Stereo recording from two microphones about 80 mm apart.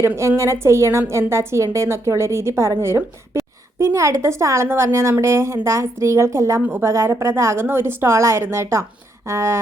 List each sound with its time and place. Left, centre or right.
0.2 s a woman's voice: right
6.6 s a woman's voice: right
6.9 s a woman's voice: right